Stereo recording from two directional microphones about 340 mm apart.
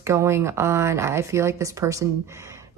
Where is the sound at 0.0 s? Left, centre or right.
Centre.